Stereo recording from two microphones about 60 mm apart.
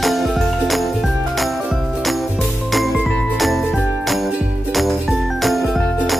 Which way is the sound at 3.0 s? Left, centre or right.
Centre.